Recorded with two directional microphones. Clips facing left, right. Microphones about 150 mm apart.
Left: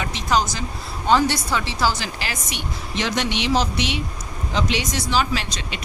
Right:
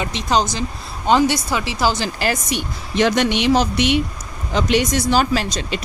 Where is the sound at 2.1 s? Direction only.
45° right (ahead or behind).